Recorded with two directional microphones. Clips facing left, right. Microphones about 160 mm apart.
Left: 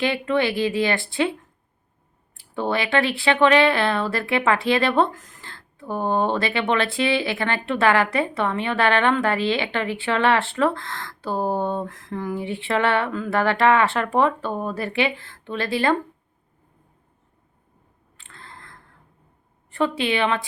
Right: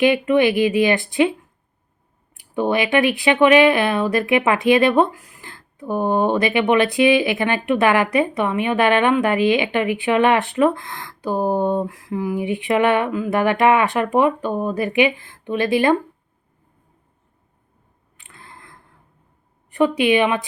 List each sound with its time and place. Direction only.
0.0 s a woman's voice: 15° right (ahead or behind)
2.3 s a woman's voice: 15° right (ahead or behind)
18.2 s a sound: 15° right (ahead or behind)
19.7 s a woman's voice: 15° right (ahead or behind)